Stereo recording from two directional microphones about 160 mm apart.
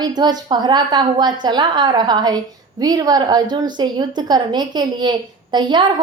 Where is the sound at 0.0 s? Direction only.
25° right (ahead or behind).